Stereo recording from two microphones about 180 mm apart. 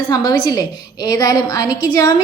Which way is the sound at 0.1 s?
25° left (ahead or behind).